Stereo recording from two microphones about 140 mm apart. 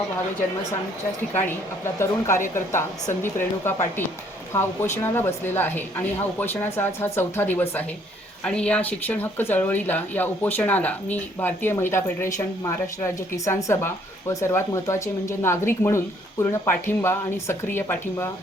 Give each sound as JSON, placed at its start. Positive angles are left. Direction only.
{"t": 1.3, "sound": "a woman's voice", "side_deg": 15}